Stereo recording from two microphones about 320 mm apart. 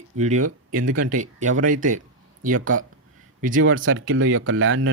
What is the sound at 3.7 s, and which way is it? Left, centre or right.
Speech, right.